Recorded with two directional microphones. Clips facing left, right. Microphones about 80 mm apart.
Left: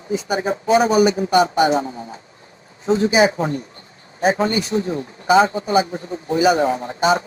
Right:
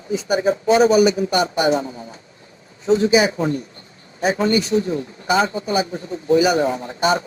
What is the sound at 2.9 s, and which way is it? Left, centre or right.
A man's voice, left.